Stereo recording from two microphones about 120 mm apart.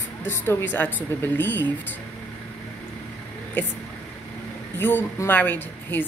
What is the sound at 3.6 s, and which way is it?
Speech, 15° left (ahead or behind).